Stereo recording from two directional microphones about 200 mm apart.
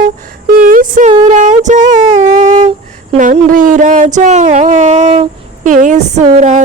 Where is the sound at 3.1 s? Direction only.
35° right (ahead or behind).